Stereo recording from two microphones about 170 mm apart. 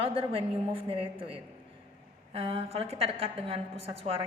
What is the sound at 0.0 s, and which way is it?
A woman's voice, 35° right (ahead or behind).